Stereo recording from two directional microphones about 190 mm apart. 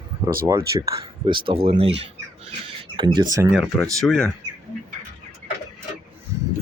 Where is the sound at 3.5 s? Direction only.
Centre (ahead or behind).